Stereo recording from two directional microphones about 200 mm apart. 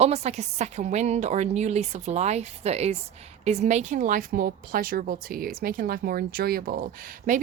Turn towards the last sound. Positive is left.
turn(degrees=-45)  # may be behind; listen again after turning